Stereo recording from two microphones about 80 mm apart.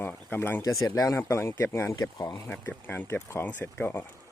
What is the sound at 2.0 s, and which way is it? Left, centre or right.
Speech, left.